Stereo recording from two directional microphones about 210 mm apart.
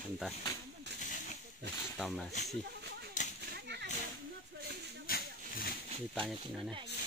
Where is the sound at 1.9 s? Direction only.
Centre (ahead or behind).